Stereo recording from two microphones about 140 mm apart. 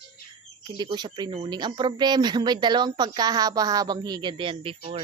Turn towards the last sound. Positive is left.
turn(degrees=-40)  # may be behind; listen again after turning